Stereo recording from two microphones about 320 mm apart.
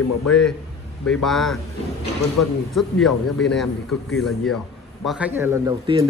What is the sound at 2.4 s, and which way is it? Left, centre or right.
Speech, left.